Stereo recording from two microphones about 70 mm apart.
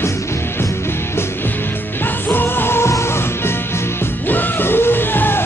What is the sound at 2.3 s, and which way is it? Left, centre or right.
Music, left.